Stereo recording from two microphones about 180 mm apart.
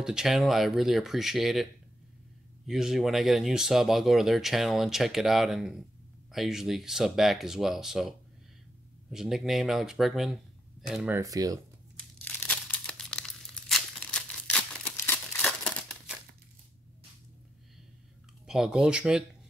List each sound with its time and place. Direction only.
0.0 s speech: 5° right (ahead or behind)
9.1 s speech: centre (ahead or behind)
11.1 s speech: 20° right (ahead or behind)
12.3 s tearing: 10° left (ahead or behind)
18.5 s speech: 5° right (ahead or behind)